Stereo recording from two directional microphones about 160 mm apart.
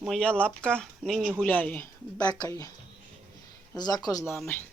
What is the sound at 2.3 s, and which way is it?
Speech, 20° left (ahead or behind).